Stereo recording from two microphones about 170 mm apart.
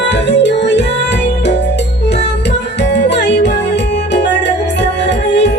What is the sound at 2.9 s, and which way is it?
Music, 90° left.